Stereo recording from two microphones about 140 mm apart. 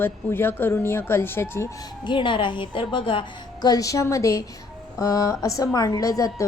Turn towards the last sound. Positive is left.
turn(degrees=25)  # may be behind; listen again after turning